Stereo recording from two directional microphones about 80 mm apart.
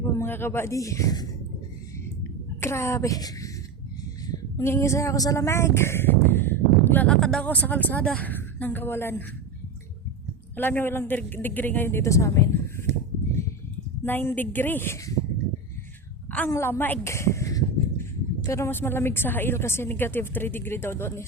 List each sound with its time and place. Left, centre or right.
0.2 s speech: left
2.6 s a woman's voice: left
4.6 s speech: left
7.1 s speech: centre
7.4 s a woman's voice: centre
10.6 s a woman's voice: left
14.0 s a woman's voice: left
16.6 s speech: left
17.1 s a sound: left
18.4 s a woman's voice: left